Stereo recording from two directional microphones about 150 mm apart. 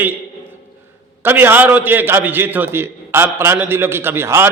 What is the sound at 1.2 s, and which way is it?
A man's voice, 15° right (ahead or behind).